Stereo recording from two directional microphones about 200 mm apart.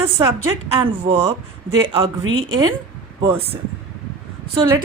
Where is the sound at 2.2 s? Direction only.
85° right.